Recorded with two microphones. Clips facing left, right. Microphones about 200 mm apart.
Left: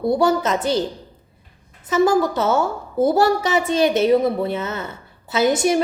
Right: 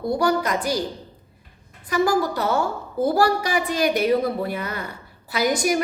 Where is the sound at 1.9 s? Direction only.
25° left (ahead or behind).